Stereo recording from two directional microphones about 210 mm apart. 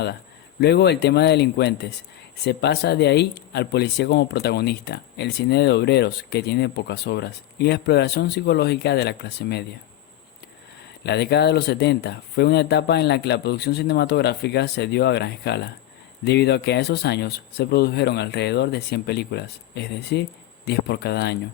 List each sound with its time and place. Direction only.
0.6 s speech: 50° left (ahead or behind)
11.0 s speech: 50° left (ahead or behind)